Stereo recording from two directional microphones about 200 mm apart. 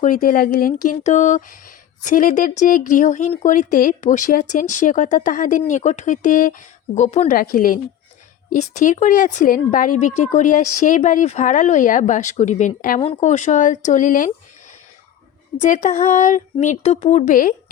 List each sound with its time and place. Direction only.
0.0 s speech: 40° left (ahead or behind)
15.6 s speech: 35° left (ahead or behind)